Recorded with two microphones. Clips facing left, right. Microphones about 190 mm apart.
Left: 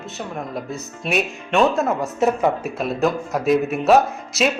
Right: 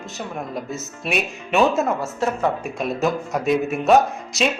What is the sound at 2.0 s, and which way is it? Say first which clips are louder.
Speech: left 4 dB; 15° left (ahead or behind).